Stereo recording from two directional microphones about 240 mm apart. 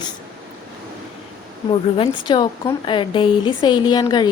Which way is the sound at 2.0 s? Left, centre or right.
Centre.